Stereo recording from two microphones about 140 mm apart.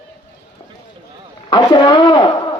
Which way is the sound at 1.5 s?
30° left (ahead or behind).